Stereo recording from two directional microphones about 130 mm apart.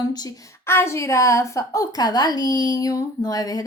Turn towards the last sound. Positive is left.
turn(degrees=30)  # may be behind; listen again after turning